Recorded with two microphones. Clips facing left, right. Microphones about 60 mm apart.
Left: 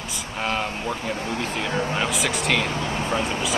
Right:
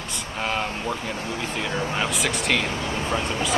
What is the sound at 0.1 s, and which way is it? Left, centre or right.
Speech, centre.